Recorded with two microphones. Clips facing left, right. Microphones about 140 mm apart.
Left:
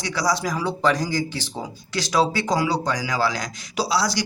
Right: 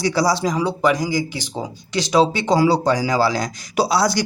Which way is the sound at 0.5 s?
15° right (ahead or behind).